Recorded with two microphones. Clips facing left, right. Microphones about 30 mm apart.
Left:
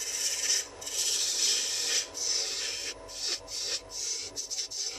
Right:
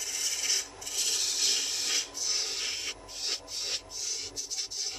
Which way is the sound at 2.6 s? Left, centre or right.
Right.